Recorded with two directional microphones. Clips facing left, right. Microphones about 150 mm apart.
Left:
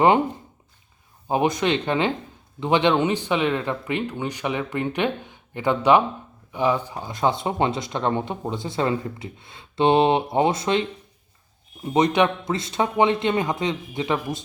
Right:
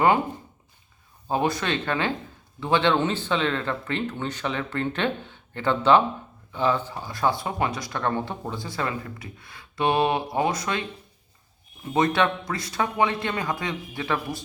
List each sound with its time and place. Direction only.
1.3 s speech: 15° left (ahead or behind)